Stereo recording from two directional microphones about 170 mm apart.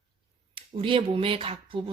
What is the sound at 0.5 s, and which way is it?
Speech, 30° right (ahead or behind).